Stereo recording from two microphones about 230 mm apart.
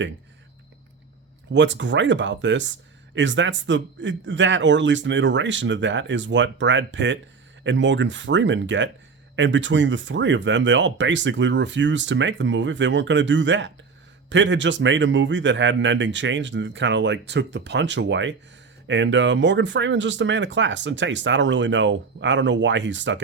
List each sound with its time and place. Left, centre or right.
1.5 s speech: right